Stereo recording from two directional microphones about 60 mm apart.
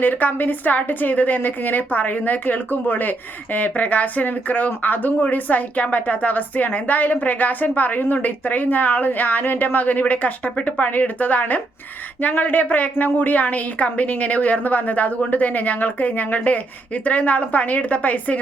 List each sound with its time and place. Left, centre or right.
0.0 s a woman's voice: left